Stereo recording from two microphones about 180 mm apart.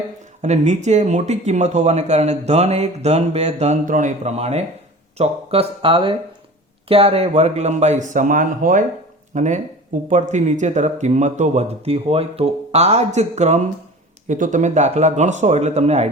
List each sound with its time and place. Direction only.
0.4 s speech: 40° right (ahead or behind)